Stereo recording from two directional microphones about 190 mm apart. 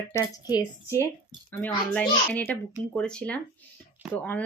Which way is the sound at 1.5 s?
5° left (ahead or behind).